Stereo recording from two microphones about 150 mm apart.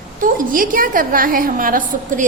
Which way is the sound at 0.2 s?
65° right (ahead or behind).